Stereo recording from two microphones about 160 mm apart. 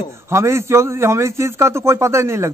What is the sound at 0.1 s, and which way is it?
A man's voice, 15° right (ahead or behind).